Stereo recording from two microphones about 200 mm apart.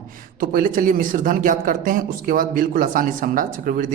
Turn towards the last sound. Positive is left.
turn(degrees=-40)  # may be behind; listen again after turning